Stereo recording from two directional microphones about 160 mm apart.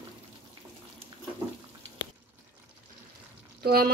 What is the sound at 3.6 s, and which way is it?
Speech, 70° right (ahead or behind).